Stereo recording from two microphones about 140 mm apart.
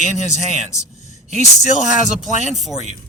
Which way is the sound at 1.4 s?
55° left (ahead or behind).